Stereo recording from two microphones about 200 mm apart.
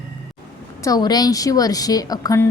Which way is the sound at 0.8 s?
20° left (ahead or behind).